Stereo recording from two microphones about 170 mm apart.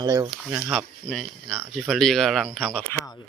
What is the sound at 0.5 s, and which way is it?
Speech, centre (ahead or behind).